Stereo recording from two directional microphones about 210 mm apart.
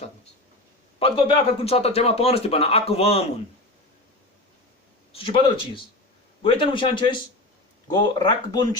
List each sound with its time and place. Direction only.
0.9 s a man's voice: 25° left (ahead or behind)
5.1 s a man's voice: 25° left (ahead or behind)